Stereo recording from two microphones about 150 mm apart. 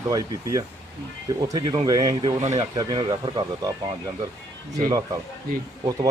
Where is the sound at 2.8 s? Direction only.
30° right (ahead or behind).